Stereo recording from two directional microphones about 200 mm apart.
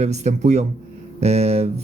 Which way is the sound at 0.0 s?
35° right (ahead or behind).